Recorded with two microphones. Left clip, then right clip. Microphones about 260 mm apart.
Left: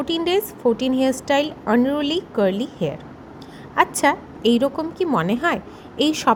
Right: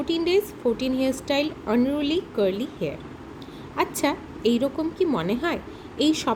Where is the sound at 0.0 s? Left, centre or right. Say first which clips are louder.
Left 2 dB; centre.